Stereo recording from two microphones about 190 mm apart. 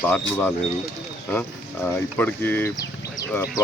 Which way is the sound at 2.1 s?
10° left (ahead or behind).